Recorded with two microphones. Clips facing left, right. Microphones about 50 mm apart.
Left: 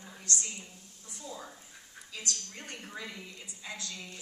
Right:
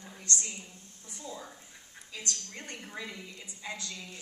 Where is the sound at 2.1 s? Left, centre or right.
Right.